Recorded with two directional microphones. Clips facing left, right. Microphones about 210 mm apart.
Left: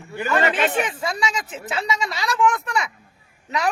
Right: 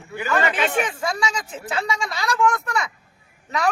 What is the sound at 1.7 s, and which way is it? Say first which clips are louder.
Speech: even; 5° left (ahead or behind).